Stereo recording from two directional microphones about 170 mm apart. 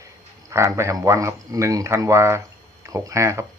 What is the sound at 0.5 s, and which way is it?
Speech, 15° right (ahead or behind).